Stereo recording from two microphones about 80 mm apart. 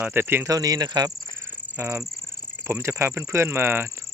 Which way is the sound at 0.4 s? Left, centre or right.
Right.